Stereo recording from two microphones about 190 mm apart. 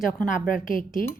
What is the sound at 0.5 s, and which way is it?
Speech, 45° left (ahead or behind).